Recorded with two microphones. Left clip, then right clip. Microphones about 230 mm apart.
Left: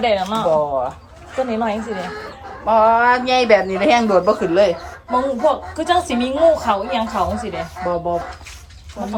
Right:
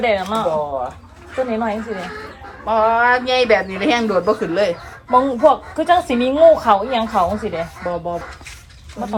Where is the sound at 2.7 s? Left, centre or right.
Left.